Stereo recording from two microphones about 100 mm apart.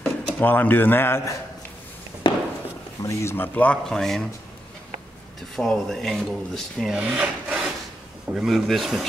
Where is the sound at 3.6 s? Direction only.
10° left (ahead or behind).